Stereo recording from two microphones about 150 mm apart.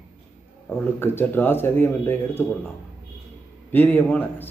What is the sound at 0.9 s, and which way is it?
Speech, 15° left (ahead or behind).